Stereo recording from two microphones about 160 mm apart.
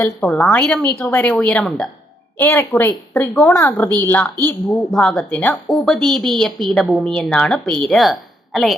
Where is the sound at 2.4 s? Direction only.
15° left (ahead or behind).